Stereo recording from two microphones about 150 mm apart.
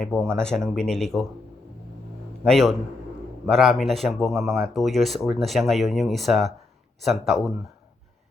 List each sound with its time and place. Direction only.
0.0 s speech: 5° left (ahead or behind)
2.4 s speech: centre (ahead or behind)